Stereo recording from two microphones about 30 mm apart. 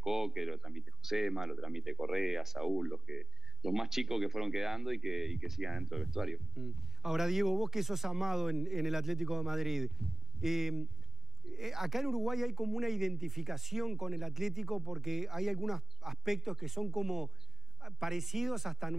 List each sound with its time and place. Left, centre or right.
0.0 s speech: centre